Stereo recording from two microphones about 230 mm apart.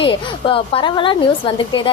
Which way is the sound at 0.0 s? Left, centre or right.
Left.